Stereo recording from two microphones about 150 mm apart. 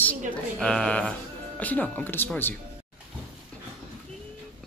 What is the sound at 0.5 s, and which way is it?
Speech, 5° left (ahead or behind).